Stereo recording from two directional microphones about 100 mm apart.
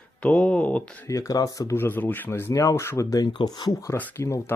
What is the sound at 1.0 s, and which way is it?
Speech, 35° left (ahead or behind).